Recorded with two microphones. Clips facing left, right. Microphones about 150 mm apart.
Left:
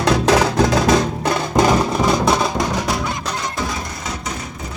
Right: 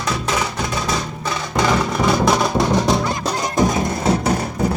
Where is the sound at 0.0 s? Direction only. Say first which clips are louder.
Left 7 dB; 75° left (ahead or behind); by 1.6 s 60° left (ahead or behind).